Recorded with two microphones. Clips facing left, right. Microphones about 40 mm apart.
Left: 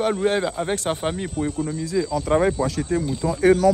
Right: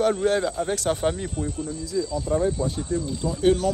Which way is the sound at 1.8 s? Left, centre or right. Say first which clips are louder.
Left 3 dB; left.